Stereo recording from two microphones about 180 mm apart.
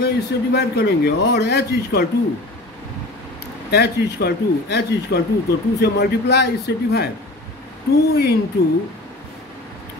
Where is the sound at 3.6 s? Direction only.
65° left (ahead or behind).